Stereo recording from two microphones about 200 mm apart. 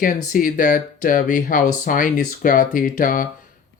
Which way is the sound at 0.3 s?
45° left (ahead or behind).